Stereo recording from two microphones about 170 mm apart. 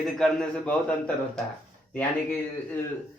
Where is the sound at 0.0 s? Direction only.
Centre (ahead or behind).